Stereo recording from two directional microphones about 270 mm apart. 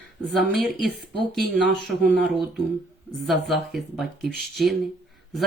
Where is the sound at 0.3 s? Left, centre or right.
Centre.